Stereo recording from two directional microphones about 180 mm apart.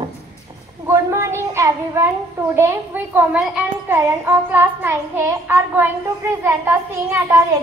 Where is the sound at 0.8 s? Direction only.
15° right (ahead or behind).